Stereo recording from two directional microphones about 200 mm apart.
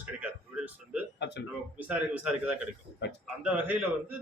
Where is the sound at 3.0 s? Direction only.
60° left (ahead or behind).